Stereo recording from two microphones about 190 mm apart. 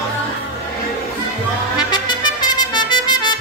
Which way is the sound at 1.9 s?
20° left (ahead or behind).